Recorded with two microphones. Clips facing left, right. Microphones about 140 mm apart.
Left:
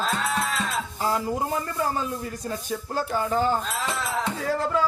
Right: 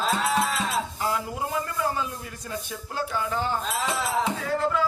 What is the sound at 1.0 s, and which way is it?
Speech, 40° left (ahead or behind).